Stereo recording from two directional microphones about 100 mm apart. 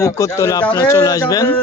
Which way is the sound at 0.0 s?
30° left (ahead or behind).